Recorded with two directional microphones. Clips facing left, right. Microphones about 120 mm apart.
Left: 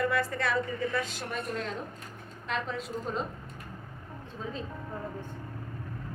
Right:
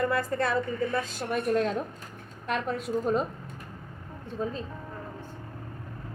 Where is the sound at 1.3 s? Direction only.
55° right (ahead or behind).